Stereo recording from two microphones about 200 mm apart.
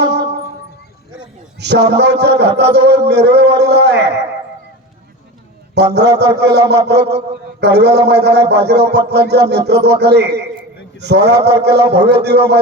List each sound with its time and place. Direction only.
0.0 s music: 55° right (ahead or behind)
1.5 s a man's voice: 55° right (ahead or behind)
5.7 s a man's voice: 55° right (ahead or behind)